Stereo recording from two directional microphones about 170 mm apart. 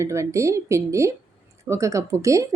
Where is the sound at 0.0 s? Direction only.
15° right (ahead or behind).